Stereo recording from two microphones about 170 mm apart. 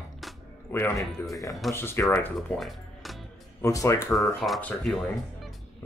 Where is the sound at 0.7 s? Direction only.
15° left (ahead or behind).